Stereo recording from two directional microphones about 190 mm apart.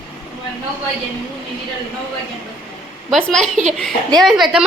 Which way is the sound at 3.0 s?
5° left (ahead or behind).